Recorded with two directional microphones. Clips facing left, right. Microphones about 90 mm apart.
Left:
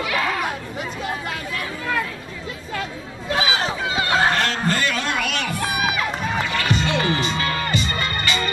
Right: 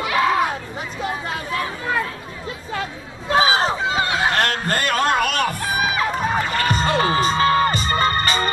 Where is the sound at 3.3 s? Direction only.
35° right (ahead or behind).